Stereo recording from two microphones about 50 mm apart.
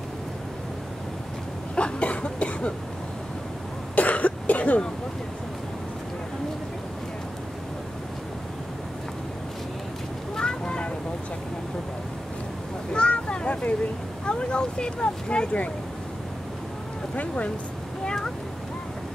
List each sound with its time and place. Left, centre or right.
1.8 s cough: left
3.9 s cough: left
10.3 s vehicle: centre
12.9 s a sound: left
17.1 s speech: left
18.0 s a sound: centre